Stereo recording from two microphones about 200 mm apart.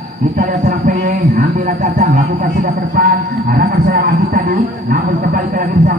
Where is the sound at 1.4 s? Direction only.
55° right (ahead or behind).